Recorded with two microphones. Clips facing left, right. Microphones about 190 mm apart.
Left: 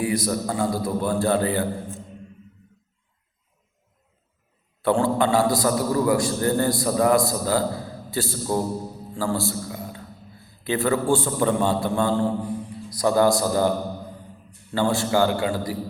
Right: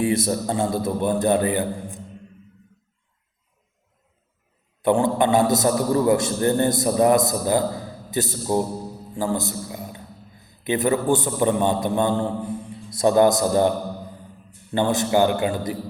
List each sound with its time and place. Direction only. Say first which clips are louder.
0.0 s a man's voice: right 2 dB; 25° right (ahead or behind)
4.8 s a man's voice: right 2 dB; 20° right (ahead or behind)
14.7 s a man's voice: right 1 dB; 20° right (ahead or behind)